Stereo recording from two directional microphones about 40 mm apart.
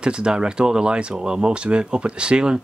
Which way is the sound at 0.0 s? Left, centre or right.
Right.